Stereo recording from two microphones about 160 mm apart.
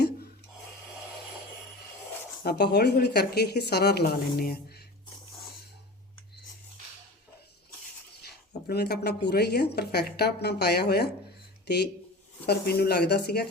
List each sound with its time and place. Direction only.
2.4 s a woman's voice: 90° left
8.6 s a woman's voice: 85° left